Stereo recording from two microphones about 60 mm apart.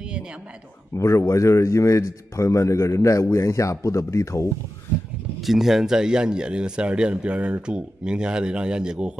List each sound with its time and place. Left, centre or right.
0.9 s a man's voice: left
5.4 s speech: centre